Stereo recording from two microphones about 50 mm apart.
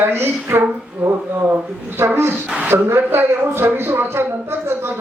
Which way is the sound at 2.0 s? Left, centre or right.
Right.